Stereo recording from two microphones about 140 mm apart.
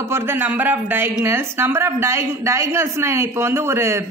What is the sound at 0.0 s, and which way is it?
Speech, 15° right (ahead or behind).